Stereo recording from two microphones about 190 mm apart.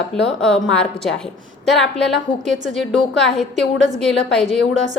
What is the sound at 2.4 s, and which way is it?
Speech, 40° right (ahead or behind).